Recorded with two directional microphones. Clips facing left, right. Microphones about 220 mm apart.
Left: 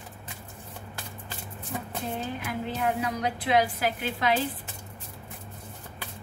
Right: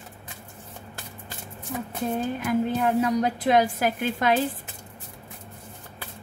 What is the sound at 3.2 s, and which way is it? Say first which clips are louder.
A woman's voice: right 4 dB; 45° right (ahead or behind).